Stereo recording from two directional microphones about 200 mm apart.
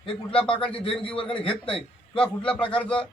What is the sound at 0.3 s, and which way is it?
Speech, 5° left (ahead or behind).